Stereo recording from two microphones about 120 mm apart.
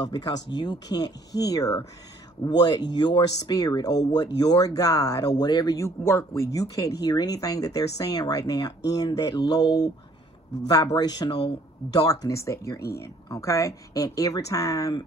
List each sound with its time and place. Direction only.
0.0 s speech: 35° left (ahead or behind)
6.0 s speech: 25° left (ahead or behind)